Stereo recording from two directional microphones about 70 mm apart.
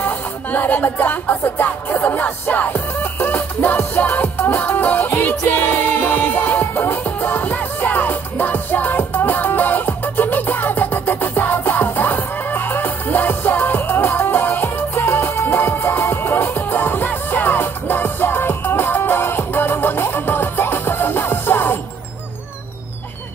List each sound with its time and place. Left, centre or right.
0.0 s music: left